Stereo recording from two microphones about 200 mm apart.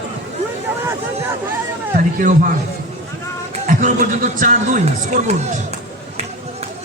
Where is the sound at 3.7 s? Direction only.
40° right (ahead or behind).